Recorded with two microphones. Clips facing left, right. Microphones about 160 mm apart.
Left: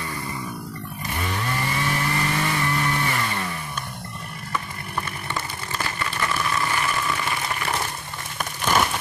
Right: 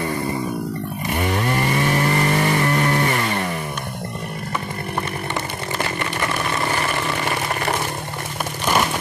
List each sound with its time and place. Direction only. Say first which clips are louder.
1.1 s chainsaw: right 7 dB; 60° right (ahead or behind)